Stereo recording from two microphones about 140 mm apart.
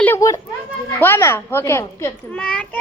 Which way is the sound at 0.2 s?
25° left (ahead or behind).